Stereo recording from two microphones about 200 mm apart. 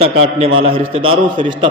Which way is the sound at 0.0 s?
30° right (ahead or behind).